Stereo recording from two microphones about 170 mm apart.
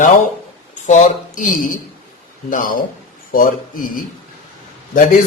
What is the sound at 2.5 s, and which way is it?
A man's voice, 50° left (ahead or behind).